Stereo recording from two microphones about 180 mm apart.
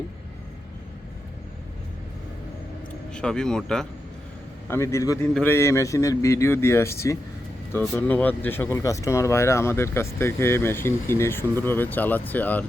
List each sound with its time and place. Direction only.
3.1 s speech: 5° left (ahead or behind)
4.7 s speech: 15° left (ahead or behind)